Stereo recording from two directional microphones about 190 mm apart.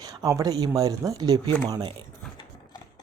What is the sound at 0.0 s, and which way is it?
Speech, 20° right (ahead or behind).